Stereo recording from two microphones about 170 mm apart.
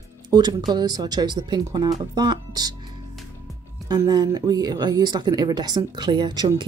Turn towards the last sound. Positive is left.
turn(degrees=-25)  # may be behind; listen again after turning